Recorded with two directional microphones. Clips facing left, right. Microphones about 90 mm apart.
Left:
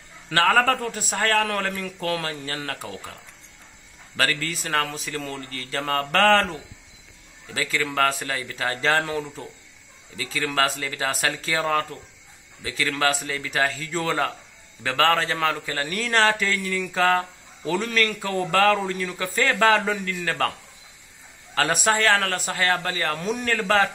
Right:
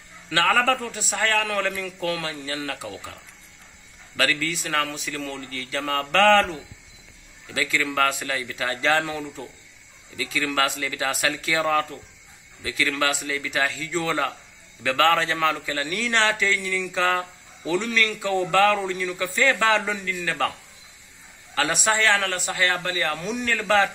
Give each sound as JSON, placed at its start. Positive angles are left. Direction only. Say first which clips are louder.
{"t": 0.3, "sound": "a man's voice", "louder": "left 1 dB", "side_deg": 40}
{"t": 4.2, "sound": "a man's voice", "louder": "right 1 dB", "side_deg": 40}
{"t": 21.5, "sound": "a man's voice", "louder": "left 1 dB", "side_deg": 40}